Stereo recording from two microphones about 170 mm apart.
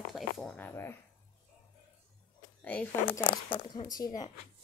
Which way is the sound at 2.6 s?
10° left (ahead or behind).